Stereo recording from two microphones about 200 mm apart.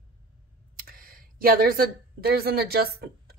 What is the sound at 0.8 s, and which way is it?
Speech, 45° right (ahead or behind).